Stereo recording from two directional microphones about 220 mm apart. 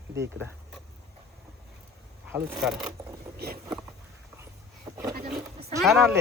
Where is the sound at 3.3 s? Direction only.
45° right (ahead or behind).